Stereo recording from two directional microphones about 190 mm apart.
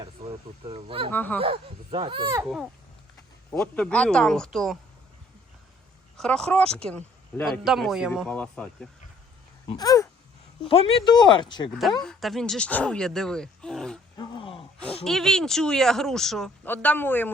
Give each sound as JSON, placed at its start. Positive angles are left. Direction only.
{"t": 0.0, "sound": "speech", "side_deg": -30}
{"t": 1.1, "sound": "speech", "side_deg": 10}
{"t": 1.4, "sound": "speech", "side_deg": -25}
{"t": 3.6, "sound": "speech", "side_deg": 5}
{"t": 6.1, "sound": "speech", "side_deg": 5}
{"t": 9.6, "sound": "speech", "side_deg": 20}
{"t": 10.7, "sound": "speech", "side_deg": 30}
{"t": 11.7, "sound": "speech", "side_deg": 0}
{"t": 14.2, "sound": "groan", "side_deg": 25}
{"t": 15.0, "sound": "speech", "side_deg": 0}